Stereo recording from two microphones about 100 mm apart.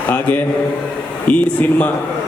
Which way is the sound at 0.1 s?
15° left (ahead or behind).